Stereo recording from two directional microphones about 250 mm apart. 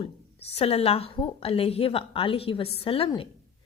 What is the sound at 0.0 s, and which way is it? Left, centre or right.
A woman's voice, left.